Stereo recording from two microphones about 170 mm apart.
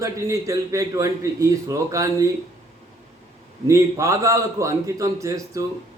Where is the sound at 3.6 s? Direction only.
15° right (ahead or behind).